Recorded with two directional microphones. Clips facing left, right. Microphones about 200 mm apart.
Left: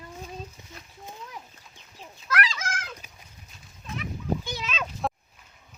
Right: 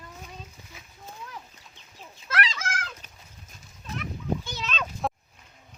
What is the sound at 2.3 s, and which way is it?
Fowl, 25° right (ahead or behind).